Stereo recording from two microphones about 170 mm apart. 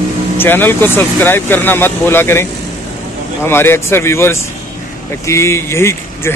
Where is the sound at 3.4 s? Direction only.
15° left (ahead or behind).